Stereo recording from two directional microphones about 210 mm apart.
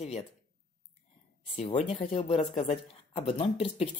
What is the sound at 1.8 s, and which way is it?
Speech, 40° left (ahead or behind).